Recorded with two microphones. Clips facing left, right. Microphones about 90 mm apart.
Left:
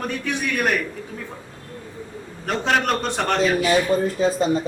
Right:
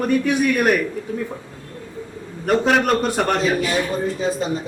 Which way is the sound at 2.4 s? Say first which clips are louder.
Right 4 dB; 5° right (ahead or behind).